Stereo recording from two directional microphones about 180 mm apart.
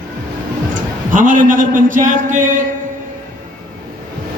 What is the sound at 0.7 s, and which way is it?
A man's voice, 45° right (ahead or behind).